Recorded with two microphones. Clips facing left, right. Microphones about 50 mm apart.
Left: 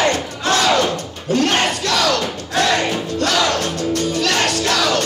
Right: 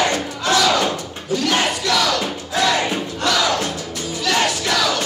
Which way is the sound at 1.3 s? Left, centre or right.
Left.